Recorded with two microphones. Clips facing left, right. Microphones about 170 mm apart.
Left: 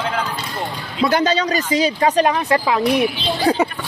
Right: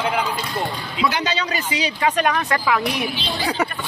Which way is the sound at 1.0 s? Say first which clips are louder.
Left 6 dB; 50° left (ahead or behind).